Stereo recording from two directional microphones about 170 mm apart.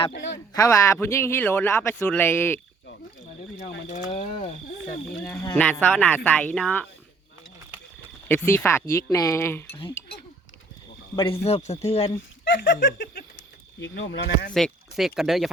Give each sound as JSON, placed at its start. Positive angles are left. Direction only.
{"t": 0.1, "sound": "speech", "side_deg": 90}
{"t": 0.5, "sound": "a man's voice", "side_deg": 20}
{"t": 3.8, "sound": "speech", "side_deg": 45}
{"t": 5.2, "sound": "a man's voice", "side_deg": 15}
{"t": 8.3, "sound": "a man's voice", "side_deg": 15}
{"t": 11.1, "sound": "speech", "side_deg": 30}
{"t": 12.5, "sound": "speech", "side_deg": 90}
{"t": 13.0, "sound": "a sound", "side_deg": 55}
{"t": 13.7, "sound": "speech", "side_deg": 90}
{"t": 14.5, "sound": "speech", "side_deg": 0}